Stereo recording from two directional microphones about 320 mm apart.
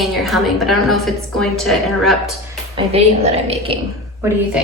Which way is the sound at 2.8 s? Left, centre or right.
Centre.